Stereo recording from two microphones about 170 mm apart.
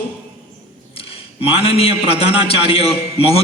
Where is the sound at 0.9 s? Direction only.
35° left (ahead or behind).